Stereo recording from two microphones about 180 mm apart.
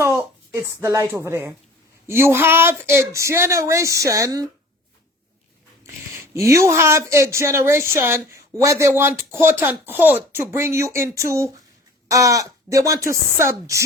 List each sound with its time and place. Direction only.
0.0 s a sound: 10° right (ahead or behind)
1.1 s speech: 15° right (ahead or behind)
5.8 s speech: 15° right (ahead or behind)